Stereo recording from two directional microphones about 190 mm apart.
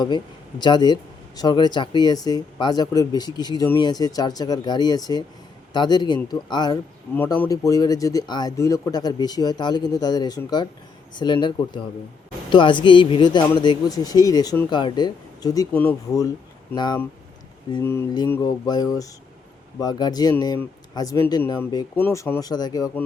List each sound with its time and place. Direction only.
0.6 s speech: 25° left (ahead or behind)
15.7 s speech: 10° left (ahead or behind)